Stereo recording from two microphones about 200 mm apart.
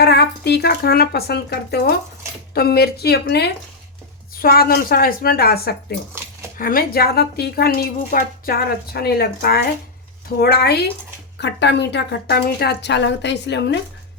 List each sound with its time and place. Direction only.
0.0 s a woman's voice: 55° left (ahead or behind)